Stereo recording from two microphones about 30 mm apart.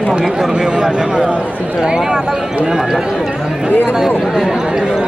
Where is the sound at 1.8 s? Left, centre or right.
Right.